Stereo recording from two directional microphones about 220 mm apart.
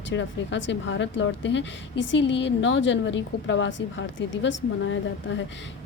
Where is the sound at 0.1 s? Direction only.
55° left (ahead or behind).